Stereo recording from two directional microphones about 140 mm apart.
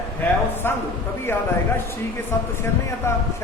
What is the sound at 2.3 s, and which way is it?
Speech, 20° left (ahead or behind).